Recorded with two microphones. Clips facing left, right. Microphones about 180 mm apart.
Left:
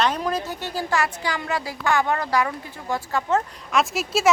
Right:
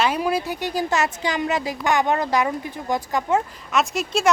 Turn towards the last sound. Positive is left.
turn(degrees=0)  # may be behind; listen again after turning